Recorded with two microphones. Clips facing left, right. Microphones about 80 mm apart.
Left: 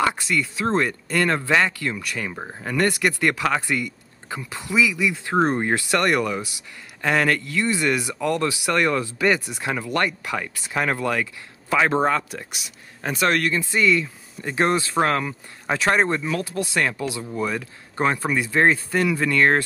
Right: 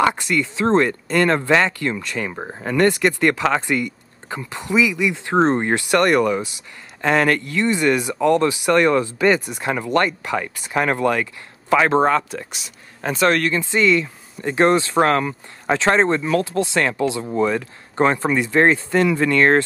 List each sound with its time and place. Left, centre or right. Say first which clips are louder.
0.4 s speech: right 6 dB; right
12.3 s speech: right 4 dB; centre
13.7 s speech: right 3 dB; right
14.4 s speech: right 5 dB; right
15.7 s speech: right 4 dB; right